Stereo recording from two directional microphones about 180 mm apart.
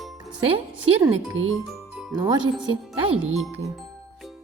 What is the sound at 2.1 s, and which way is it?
Speech, 20° right (ahead or behind).